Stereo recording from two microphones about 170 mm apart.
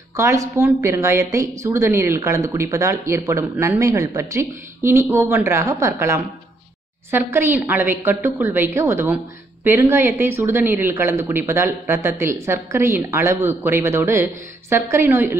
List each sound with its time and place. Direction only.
0.1 s speech: 20° right (ahead or behind)